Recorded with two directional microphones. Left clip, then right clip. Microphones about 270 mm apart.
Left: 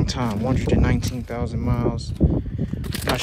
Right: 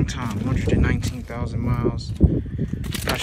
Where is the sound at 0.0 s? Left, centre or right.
Left.